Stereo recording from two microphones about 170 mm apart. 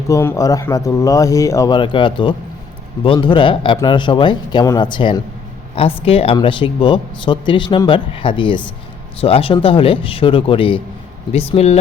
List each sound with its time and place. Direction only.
0.1 s speech: 20° left (ahead or behind); by 11.8 s 40° left (ahead or behind)